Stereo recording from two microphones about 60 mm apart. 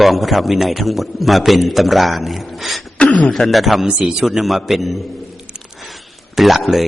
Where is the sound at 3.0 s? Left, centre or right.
Centre.